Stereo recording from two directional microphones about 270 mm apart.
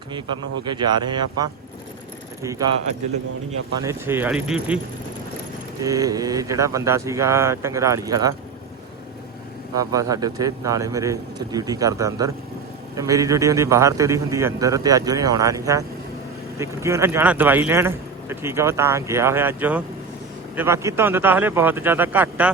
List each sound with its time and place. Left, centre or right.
0.6 s speech: centre
3.8 s speech: centre
5.8 s speech: centre
9.7 s speech: centre